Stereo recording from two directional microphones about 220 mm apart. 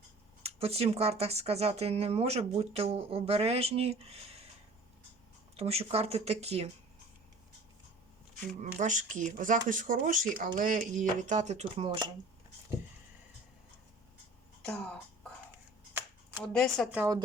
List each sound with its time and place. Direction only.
0.4 s speech: 25° right (ahead or behind)
5.5 s speech: 25° right (ahead or behind)
8.8 s speech: 35° right (ahead or behind)
14.6 s speech: 5° left (ahead or behind)
16.5 s speech: centre (ahead or behind)